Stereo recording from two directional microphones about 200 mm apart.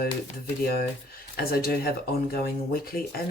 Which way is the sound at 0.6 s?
50° left (ahead or behind).